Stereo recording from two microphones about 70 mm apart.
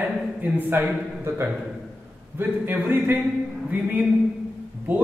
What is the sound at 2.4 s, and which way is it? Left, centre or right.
A man's voice, right.